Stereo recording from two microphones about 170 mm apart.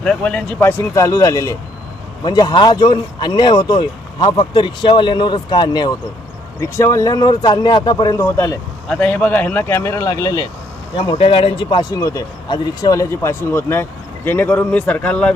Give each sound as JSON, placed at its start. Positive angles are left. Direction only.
{"t": 0.0, "sound": "speech", "side_deg": 5}
{"t": 10.9, "sound": "speech", "side_deg": 30}